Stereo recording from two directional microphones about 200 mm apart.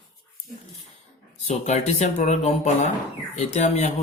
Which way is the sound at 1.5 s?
35° left (ahead or behind).